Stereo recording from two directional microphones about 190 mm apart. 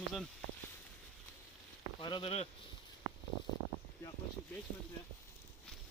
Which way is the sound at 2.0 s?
25° left (ahead or behind).